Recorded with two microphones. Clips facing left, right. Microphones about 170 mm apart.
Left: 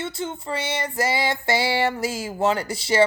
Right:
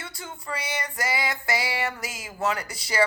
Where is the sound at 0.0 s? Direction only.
25° left (ahead or behind).